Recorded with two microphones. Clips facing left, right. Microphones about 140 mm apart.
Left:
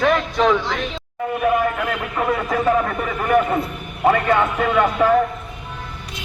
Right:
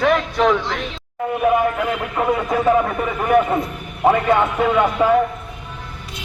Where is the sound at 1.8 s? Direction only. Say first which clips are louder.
Right 2 dB; 10° right (ahead or behind).